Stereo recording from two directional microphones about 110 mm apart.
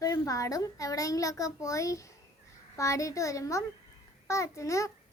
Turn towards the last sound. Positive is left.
turn(degrees=30)  # may be behind; listen again after turning